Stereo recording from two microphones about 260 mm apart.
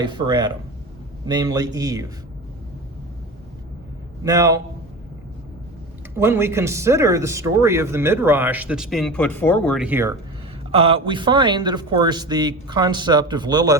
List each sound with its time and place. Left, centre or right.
0.0 s speech: centre
4.2 s speech: centre
6.1 s speech: centre
10.7 s speech: right